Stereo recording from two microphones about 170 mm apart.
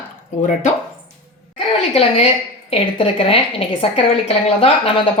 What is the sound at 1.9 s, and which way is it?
A woman's voice, 35° left (ahead or behind).